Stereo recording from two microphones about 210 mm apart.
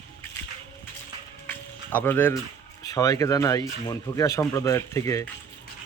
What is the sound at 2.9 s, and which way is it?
Speech, 15° left (ahead or behind).